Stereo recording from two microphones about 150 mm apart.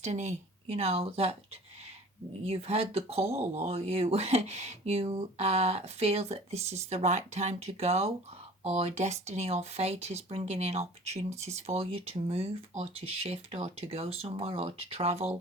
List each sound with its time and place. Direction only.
0.0 s speech: 45° right (ahead or behind)
2.4 s speech: 45° right (ahead or behind)